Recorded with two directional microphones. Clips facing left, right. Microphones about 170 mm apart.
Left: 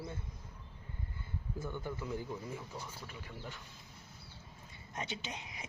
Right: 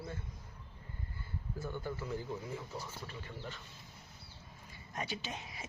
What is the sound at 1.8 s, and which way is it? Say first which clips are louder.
Speech: even; 15° left (ahead or behind).